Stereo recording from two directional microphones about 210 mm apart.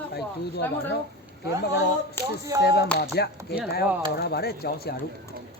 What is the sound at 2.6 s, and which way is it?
Speech, 50° left (ahead or behind).